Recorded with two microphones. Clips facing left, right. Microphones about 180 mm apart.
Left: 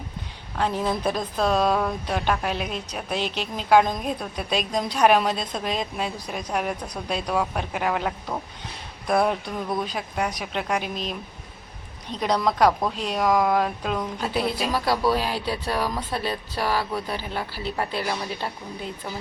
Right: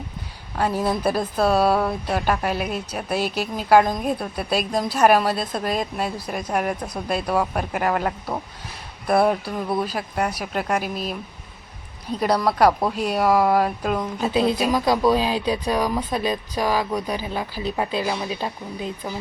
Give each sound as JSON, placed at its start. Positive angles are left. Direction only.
{"t": 0.6, "sound": "speech", "side_deg": -10}
{"t": 14.3, "sound": "a woman's voice", "side_deg": -20}